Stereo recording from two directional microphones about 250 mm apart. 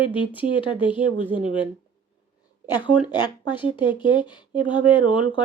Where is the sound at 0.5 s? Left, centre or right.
Centre.